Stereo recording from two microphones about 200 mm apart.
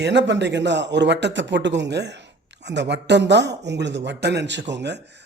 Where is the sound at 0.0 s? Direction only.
60° right (ahead or behind).